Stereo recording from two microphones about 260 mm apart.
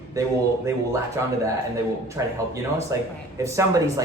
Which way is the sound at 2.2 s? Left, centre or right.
Centre.